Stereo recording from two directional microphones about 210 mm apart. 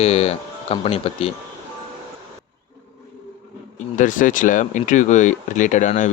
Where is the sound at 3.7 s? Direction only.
35° left (ahead or behind).